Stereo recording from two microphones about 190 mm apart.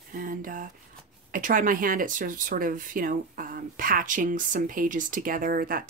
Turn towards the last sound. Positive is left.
turn(degrees=-50)  # may be behind; listen again after turning